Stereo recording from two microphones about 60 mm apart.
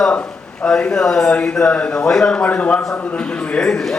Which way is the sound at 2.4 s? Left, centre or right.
Left.